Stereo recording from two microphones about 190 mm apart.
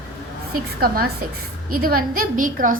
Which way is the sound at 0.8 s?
55° right (ahead or behind).